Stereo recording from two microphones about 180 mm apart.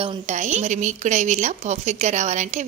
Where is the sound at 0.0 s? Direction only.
35° right (ahead or behind).